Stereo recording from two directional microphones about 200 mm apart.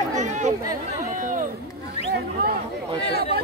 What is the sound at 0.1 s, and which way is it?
Chatter, 35° right (ahead or behind).